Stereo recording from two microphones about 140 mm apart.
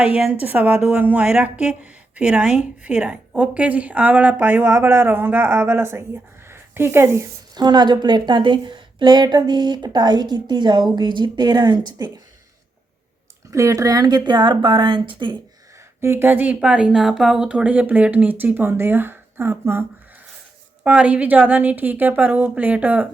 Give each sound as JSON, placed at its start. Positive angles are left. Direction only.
{"t": 0.2, "sound": "a woman's voice", "side_deg": -10}
{"t": 6.5, "sound": "a sound", "side_deg": -15}
{"t": 7.5, "sound": "a woman's voice", "side_deg": -30}
{"t": 13.5, "sound": "a woman's voice", "side_deg": -20}
{"t": 16.0, "sound": "a woman's voice", "side_deg": -15}
{"t": 20.8, "sound": "a woman's voice", "side_deg": -10}